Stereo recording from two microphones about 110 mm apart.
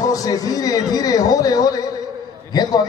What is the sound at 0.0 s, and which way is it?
A man's voice, 35° left (ahead or behind).